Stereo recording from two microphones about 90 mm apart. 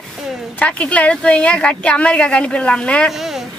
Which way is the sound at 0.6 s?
15° left (ahead or behind).